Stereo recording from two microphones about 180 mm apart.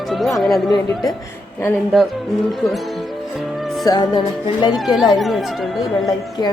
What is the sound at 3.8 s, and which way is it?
Music, 20° left (ahead or behind).